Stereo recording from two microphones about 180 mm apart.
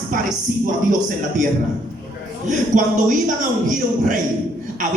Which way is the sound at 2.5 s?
45° right (ahead or behind).